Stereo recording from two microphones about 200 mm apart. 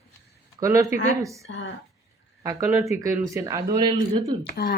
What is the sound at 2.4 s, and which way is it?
Speech, 15° right (ahead or behind).